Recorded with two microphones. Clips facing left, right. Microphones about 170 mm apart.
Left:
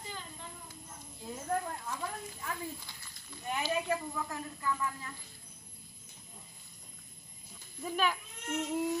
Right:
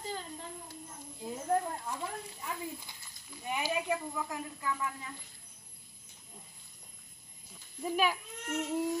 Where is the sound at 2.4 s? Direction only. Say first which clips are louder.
Even; 15° right (ahead or behind).